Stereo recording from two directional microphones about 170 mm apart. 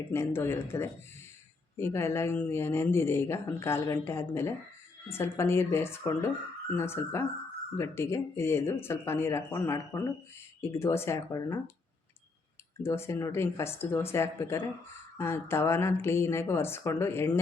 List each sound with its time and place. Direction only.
0.1 s speech: 15° left (ahead or behind)
12.8 s speech: 15° left (ahead or behind)